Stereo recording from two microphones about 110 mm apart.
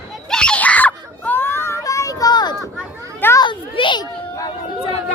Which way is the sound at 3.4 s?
50° left (ahead or behind).